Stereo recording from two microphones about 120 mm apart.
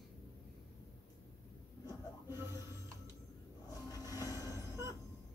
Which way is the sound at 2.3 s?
20° right (ahead or behind).